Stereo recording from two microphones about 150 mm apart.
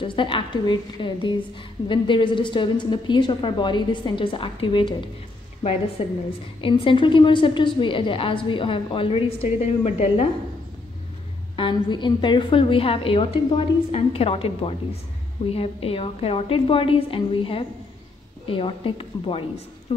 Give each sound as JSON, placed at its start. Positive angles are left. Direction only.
{"t": 0.0, "sound": "a woman's voice", "side_deg": 35}
{"t": 11.5, "sound": "a woman's voice", "side_deg": 35}
{"t": 19.9, "sound": "a sound", "side_deg": 40}